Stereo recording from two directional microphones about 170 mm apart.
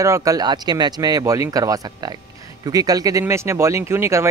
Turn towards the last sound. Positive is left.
turn(degrees=-15)  # may be behind; listen again after turning